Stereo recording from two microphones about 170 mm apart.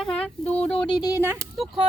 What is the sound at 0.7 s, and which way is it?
Speech, 30° left (ahead or behind).